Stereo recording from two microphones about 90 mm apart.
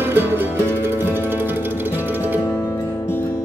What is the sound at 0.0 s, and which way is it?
Music, 25° right (ahead or behind).